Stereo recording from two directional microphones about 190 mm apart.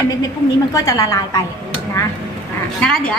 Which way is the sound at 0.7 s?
15° left (ahead or behind).